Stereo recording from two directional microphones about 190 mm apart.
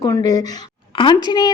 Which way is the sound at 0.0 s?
20° left (ahead or behind).